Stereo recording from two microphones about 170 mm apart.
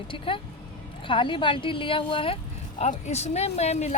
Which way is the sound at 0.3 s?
30° left (ahead or behind).